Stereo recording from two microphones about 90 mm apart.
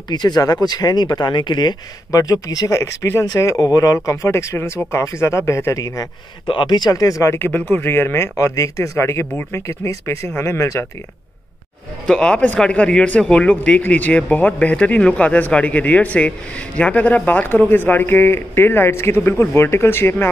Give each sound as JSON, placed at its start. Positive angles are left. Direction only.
{"t": 0.1, "sound": "speech", "side_deg": 50}
{"t": 2.0, "sound": "speech", "side_deg": 45}
{"t": 6.4, "sound": "speech", "side_deg": 65}
{"t": 7.3, "sound": "speech", "side_deg": 25}
{"t": 12.1, "sound": "speech", "side_deg": 10}